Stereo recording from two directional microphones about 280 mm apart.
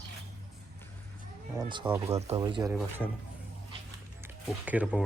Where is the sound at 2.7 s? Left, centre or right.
Centre.